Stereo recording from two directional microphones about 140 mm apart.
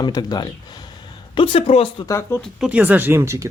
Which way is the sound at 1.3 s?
40° left (ahead or behind).